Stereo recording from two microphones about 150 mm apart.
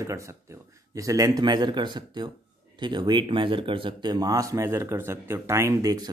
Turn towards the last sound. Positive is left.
turn(degrees=-25)  # may be behind; listen again after turning